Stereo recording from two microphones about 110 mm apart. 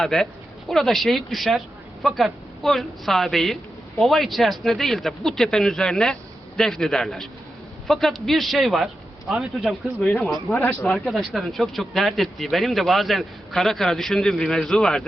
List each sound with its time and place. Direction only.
0.0 s a man's voice: 5° left (ahead or behind)
10.0 s speech: 10° left (ahead or behind)
10.9 s speech: centre (ahead or behind)